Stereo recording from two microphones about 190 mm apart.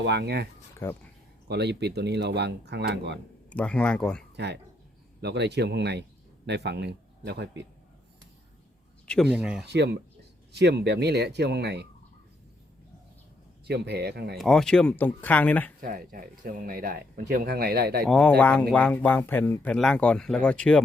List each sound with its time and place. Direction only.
0.0 s speech: 65° right (ahead or behind)
0.8 s speech: 10° left (ahead or behind)
1.5 s speech: 60° right (ahead or behind)
3.5 s speech: 5° left (ahead or behind)
5.2 s speech: 65° right (ahead or behind)
9.3 s speech: 5° right (ahead or behind)
9.6 s speech: 60° right (ahead or behind)
13.7 s speech: 60° right (ahead or behind)
14.3 s speech: centre (ahead or behind)
15.8 s speech: 50° right (ahead or behind)
18.1 s speech: 5° left (ahead or behind)